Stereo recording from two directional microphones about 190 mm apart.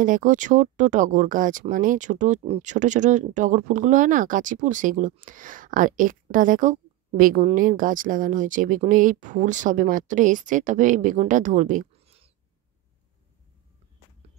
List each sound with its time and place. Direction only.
0.0 s a woman's voice: 45° right (ahead or behind)